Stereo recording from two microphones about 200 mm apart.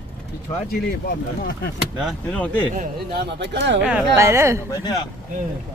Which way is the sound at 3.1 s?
60° right (ahead or behind).